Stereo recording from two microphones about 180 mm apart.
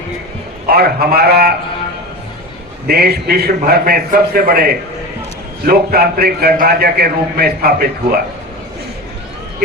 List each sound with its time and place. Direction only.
0.7 s a man's voice: 60° right (ahead or behind)
2.8 s a man's voice: 60° right (ahead or behind)